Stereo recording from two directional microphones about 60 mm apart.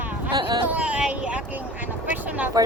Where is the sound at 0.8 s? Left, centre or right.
Centre.